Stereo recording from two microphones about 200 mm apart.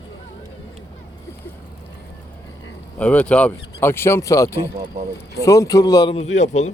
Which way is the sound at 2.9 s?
5° left (ahead or behind).